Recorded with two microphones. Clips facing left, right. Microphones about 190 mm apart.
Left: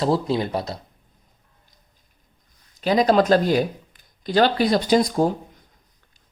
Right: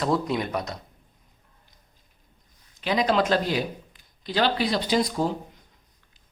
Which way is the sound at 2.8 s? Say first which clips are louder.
Left 6 dB; 40° left (ahead or behind).